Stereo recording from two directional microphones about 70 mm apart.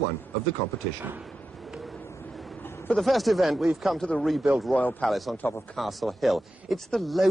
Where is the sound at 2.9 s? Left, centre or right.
Centre.